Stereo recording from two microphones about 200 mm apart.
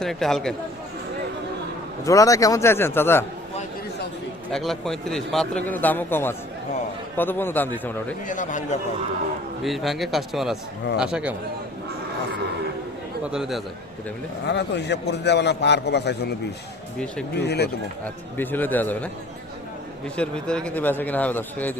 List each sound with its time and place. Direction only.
0.0 s a man's voice: centre (ahead or behind)
2.0 s speech: 15° left (ahead or behind)
4.5 s a man's voice: centre (ahead or behind)
8.3 s speech: 40° left (ahead or behind)
9.6 s a man's voice: centre (ahead or behind)
13.3 s a man's voice: centre (ahead or behind)
14.4 s a man's voice: 60° left (ahead or behind)
17.3 s a man's voice: 55° left (ahead or behind)
18.0 s speech: 10° left (ahead or behind)
20.1 s speech: 5° left (ahead or behind)